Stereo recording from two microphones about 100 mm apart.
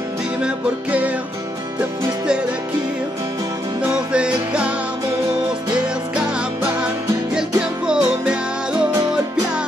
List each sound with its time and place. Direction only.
3.8 s music: 10° right (ahead or behind)
6.1 s music: 10° right (ahead or behind)